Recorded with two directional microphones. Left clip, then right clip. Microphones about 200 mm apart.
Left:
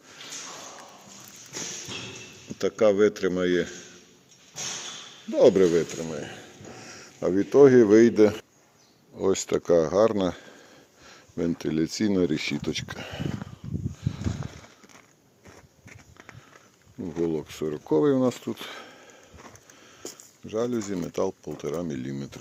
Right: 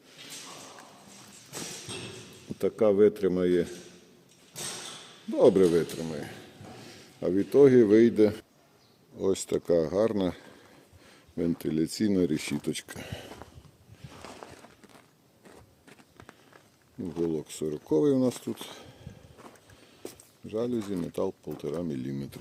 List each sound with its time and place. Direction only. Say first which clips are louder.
2.6 s speech: left 2 dB; 15° right (ahead or behind)
5.3 s speech: left 3 dB; 15° right (ahead or behind)
6.8 s speech: left 3 dB; centre (ahead or behind)
17.2 s speech: left 3 dB; centre (ahead or behind)
18.6 s a sound: left 5 dB; centre (ahead or behind)
20.5 s speech: left 3 dB; centre (ahead or behind)